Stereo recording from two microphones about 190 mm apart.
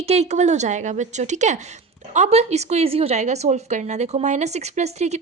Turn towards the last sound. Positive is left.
turn(degrees=-35)  # may be behind; listen again after turning